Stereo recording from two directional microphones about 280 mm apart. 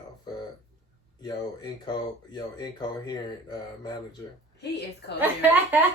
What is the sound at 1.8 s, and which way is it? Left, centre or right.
Speech, centre.